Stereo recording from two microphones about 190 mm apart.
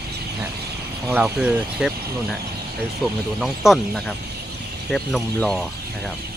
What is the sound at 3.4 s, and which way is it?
Speech, centre (ahead or behind).